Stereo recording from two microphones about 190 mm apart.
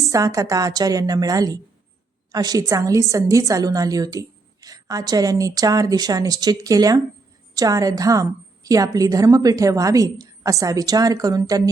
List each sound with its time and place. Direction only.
0.0 s a woman's voice: 15° right (ahead or behind)